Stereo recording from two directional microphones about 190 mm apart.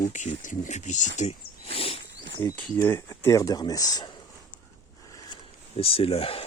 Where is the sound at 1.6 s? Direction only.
30° left (ahead or behind).